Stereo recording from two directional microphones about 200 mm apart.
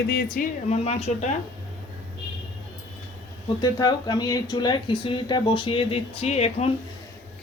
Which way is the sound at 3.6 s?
20° left (ahead or behind).